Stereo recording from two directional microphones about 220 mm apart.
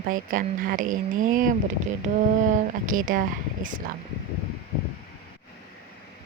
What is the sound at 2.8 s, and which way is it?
Speech, 35° right (ahead or behind).